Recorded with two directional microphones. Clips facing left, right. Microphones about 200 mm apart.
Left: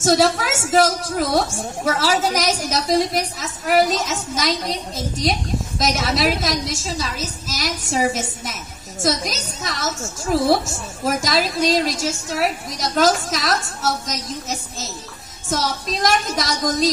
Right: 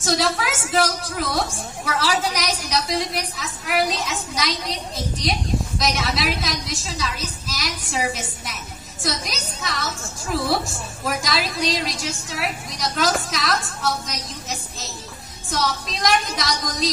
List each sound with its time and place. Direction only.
0.0 s a woman's voice: 45° left (ahead or behind)